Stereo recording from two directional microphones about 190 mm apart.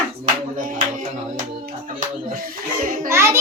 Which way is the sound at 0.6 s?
45° right (ahead or behind).